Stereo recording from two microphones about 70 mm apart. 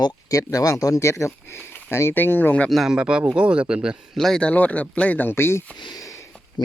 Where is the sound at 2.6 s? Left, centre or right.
Centre.